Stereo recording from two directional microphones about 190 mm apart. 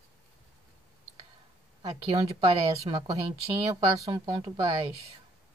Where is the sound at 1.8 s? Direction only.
30° right (ahead or behind).